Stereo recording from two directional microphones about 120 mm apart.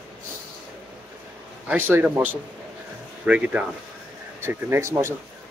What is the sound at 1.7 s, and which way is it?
Speech, 15° right (ahead or behind).